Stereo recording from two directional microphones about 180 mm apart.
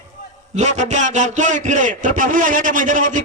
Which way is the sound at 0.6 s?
40° right (ahead or behind).